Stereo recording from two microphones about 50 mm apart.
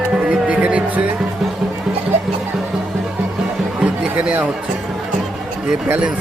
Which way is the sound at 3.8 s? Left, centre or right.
Right.